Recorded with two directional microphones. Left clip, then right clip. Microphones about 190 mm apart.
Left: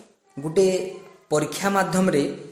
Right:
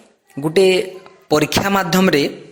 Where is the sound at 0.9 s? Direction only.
Centre (ahead or behind).